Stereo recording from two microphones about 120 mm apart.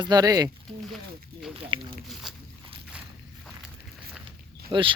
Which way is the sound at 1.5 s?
45° right (ahead or behind).